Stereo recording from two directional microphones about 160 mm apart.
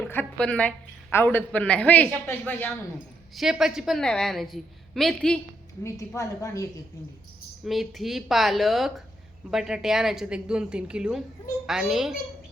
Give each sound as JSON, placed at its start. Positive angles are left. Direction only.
{"t": 0.0, "sound": "a woman's voice", "side_deg": 10}
{"t": 3.3, "sound": "a woman's voice", "side_deg": 0}
{"t": 6.1, "sound": "a woman's voice", "side_deg": 20}
{"t": 7.6, "sound": "a woman's voice", "side_deg": 0}